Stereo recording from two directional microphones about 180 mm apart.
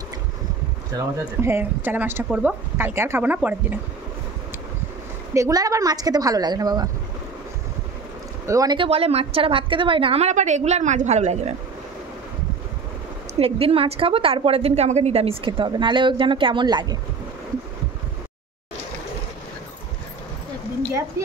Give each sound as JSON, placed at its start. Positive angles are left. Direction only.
{"t": 1.2, "sound": "speech", "side_deg": -10}
{"t": 5.3, "sound": "a woman's voice", "side_deg": -20}
{"t": 8.5, "sound": "a woman's voice", "side_deg": -20}
{"t": 13.4, "sound": "a woman's voice", "side_deg": -30}